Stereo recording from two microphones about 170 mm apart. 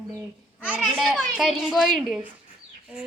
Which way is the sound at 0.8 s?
Centre (ahead or behind).